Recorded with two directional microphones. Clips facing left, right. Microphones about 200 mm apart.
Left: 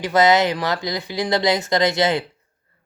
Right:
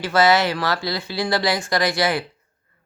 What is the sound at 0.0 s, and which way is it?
Speech, 20° left (ahead or behind).